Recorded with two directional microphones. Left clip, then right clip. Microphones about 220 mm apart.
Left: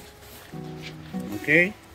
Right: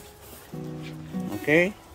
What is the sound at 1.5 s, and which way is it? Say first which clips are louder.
Speech: left 1 dB; 15° right (ahead or behind).